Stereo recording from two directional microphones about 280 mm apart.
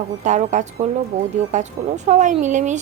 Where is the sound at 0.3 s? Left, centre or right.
Right.